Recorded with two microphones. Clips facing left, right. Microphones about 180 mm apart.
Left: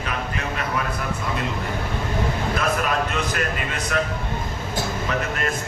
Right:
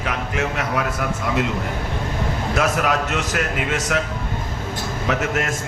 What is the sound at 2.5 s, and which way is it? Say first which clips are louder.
A man's voice: right 5 dB; 85° right.